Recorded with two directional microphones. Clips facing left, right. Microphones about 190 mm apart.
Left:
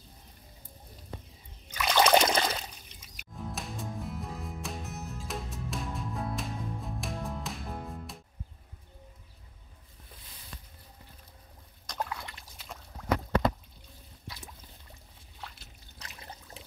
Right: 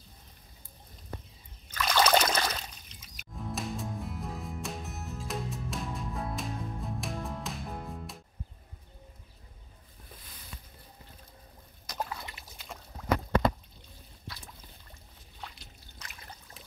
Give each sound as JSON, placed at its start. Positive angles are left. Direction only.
{"t": 1.7, "sound": "trickle", "side_deg": 15}
{"t": 3.3, "sound": "music", "side_deg": 0}
{"t": 11.8, "sound": "rowboat", "side_deg": -5}
{"t": 16.0, "sound": "a sound", "side_deg": 30}